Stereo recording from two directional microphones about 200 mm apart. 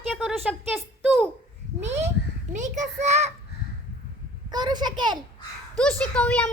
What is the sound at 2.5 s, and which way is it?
Speech, 35° right (ahead or behind).